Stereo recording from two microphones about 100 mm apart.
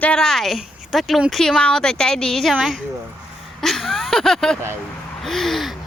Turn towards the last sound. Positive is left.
turn(degrees=0)  # may be behind; listen again after turning